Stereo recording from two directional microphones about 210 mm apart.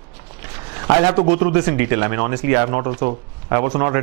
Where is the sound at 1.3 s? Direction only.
10° right (ahead or behind).